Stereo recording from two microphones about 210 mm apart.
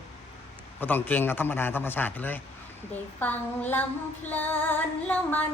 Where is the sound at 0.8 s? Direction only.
10° left (ahead or behind).